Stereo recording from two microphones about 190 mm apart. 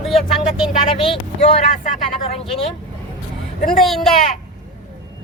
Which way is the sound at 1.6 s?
45° left (ahead or behind).